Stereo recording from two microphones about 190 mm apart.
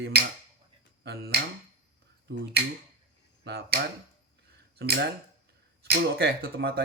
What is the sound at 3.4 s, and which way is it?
Speech, 60° right (ahead or behind).